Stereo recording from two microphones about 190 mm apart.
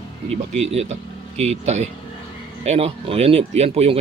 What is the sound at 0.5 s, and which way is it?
Speech, 35° right (ahead or behind).